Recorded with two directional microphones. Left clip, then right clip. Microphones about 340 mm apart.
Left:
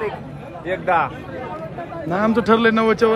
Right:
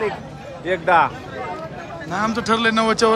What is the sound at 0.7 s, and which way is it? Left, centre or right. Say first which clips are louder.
Speech: right 3 dB; right.